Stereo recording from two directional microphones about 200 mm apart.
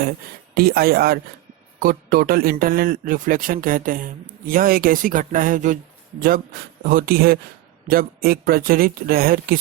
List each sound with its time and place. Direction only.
0.5 s a man's voice: 50° right (ahead or behind)